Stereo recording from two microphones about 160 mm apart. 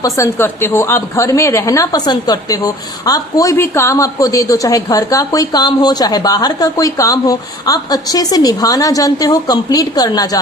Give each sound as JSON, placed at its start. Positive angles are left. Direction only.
{"t": 0.0, "sound": "a woman's voice", "side_deg": 15}